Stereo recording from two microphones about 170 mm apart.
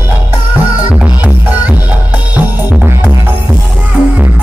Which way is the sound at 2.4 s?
10° right (ahead or behind).